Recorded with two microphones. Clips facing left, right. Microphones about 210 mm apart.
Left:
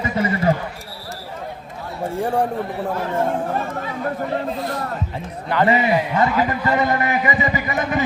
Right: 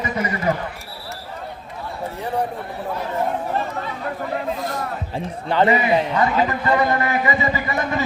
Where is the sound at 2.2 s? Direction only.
50° left (ahead or behind).